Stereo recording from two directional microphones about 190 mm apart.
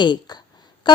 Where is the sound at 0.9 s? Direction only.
25° left (ahead or behind).